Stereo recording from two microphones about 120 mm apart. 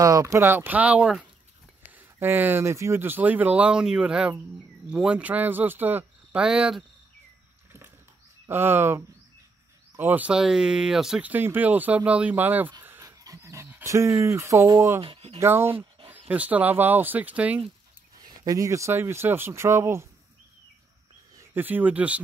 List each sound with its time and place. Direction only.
0.0 s speech: 30° right (ahead or behind); by 6.8 s 5° right (ahead or behind)
8.5 s speech: 20° right (ahead or behind)
13.0 s dog: 30° right (ahead or behind)
15.0 s speech: 50° right (ahead or behind)
15.3 s speech: 20° right (ahead or behind)
18.2 s speech: 30° right (ahead or behind)
21.4 s speech: 15° right (ahead or behind)